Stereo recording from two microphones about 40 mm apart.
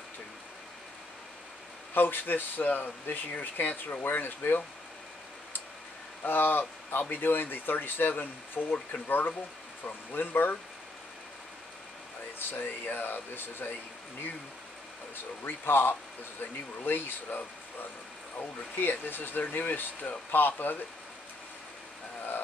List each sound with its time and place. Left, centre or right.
2.0 s speech: left
6.2 s speech: left
12.4 s speech: left
15.1 s speech: left
18.4 s speech: left